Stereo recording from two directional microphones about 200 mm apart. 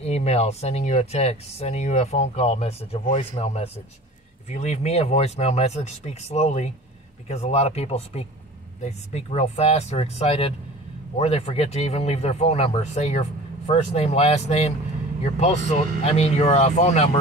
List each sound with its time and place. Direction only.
0.0 s speech: 30° left (ahead or behind)